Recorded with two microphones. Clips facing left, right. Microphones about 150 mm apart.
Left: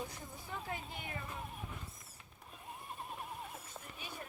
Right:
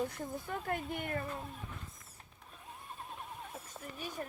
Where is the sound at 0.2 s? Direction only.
55° right (ahead or behind).